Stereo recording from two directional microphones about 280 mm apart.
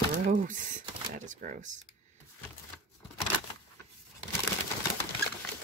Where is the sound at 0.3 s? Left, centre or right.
Right.